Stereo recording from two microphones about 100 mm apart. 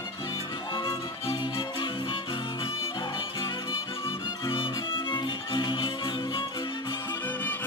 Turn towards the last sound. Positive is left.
turn(degrees=20)  # may be behind; listen again after turning